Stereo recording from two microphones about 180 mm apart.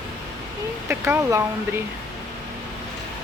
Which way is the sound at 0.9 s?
10° right (ahead or behind).